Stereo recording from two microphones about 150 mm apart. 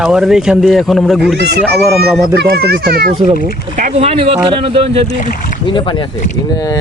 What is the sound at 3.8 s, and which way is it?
Speech, 60° right (ahead or behind).